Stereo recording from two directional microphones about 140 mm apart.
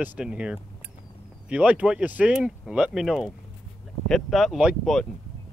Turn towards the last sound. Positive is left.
turn(degrees=-5)  # may be behind; listen again after turning